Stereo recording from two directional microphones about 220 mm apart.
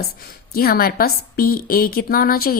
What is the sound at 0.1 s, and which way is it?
A woman's voice, 45° left (ahead or behind).